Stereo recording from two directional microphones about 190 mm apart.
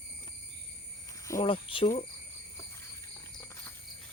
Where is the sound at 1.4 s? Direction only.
30° left (ahead or behind).